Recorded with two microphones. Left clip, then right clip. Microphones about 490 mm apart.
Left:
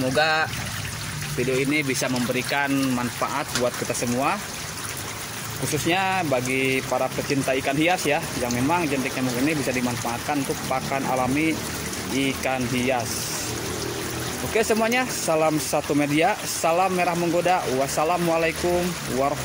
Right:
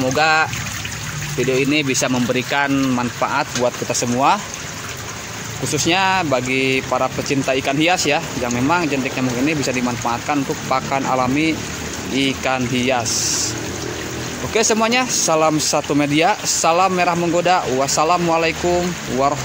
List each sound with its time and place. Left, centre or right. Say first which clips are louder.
0.1 s trickle: right 6 dB; left
1.6 s speech: right 6 dB; left
5.9 s speech: right 6 dB; left
14.5 s speech: right 5 dB; left